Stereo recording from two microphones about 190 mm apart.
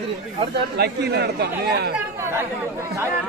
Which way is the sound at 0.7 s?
60° right (ahead or behind).